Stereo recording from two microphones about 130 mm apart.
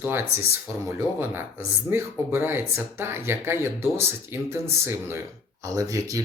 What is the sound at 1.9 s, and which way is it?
Speech, 15° right (ahead or behind).